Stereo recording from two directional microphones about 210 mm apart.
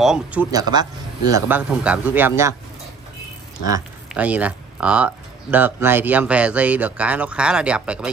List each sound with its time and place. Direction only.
0.0 s speech: 5° right (ahead or behind)
0.5 s speech: 20° right (ahead or behind)
1.3 s speech: 5° right (ahead or behind)
4.1 s speech: 5° right (ahead or behind)